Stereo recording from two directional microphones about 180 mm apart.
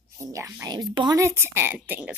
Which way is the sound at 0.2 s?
15° right (ahead or behind).